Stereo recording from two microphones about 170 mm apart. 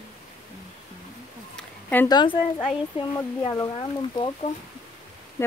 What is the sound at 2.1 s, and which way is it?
Humming, 25° left (ahead or behind).